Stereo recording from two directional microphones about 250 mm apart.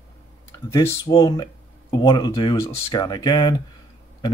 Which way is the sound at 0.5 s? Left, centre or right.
Centre.